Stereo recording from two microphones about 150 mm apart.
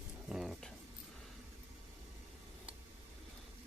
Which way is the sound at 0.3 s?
Centre (ahead or behind).